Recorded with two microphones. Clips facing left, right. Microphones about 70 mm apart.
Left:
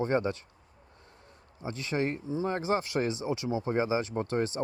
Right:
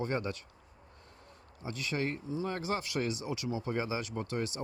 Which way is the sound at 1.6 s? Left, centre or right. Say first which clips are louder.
Left 4 dB; left.